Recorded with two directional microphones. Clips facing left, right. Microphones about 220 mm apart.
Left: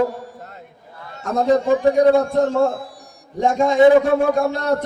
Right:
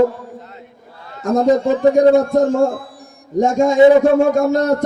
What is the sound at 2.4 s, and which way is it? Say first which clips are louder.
A man's voice: right 3 dB; 45° right (ahead or behind).